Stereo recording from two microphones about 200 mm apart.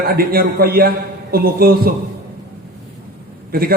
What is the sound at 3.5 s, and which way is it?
Speech, 50° right (ahead or behind).